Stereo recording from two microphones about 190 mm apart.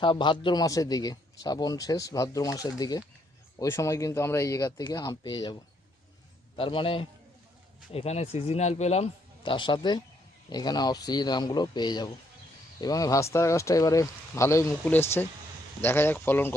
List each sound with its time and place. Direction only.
0.0 s a man's voice: 25° left (ahead or behind)
6.6 s a man's voice: 25° left (ahead or behind); by 16.6 s 10° left (ahead or behind)